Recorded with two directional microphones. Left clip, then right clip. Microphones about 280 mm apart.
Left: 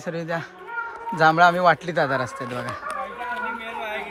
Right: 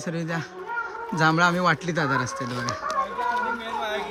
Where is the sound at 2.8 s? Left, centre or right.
Centre.